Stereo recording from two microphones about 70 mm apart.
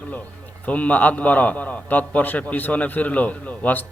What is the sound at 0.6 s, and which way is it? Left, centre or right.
A man's voice, left.